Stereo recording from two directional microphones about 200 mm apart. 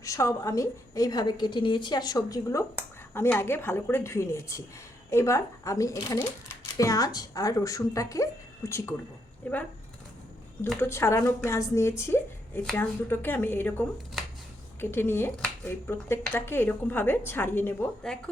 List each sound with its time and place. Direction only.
0.0 s speech: 15° left (ahead or behind)
10.7 s speech: 10° left (ahead or behind)